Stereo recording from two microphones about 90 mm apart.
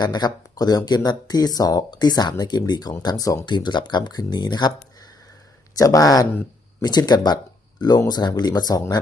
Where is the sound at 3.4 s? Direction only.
60° left (ahead or behind).